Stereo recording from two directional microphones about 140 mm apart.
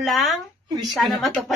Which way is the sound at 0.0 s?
Centre (ahead or behind).